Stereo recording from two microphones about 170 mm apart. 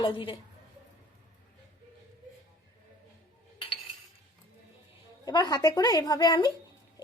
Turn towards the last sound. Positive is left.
turn(degrees=25)  # may be behind; listen again after turning